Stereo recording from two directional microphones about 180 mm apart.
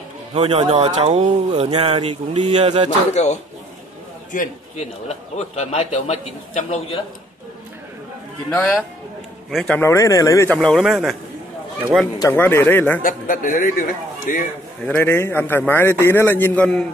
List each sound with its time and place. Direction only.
0.3 s speech: 35° right (ahead or behind)
3.1 s a man's voice: 40° left (ahead or behind)
9.5 s speech: centre (ahead or behind)
9.8 s a man's voice: 15° left (ahead or behind); by 11.1 s centre (ahead or behind)
12.2 s a man's voice: 10° left (ahead or behind)
13.0 s a man's voice: 50° left (ahead or behind)
14.9 s a man's voice: 10° left (ahead or behind)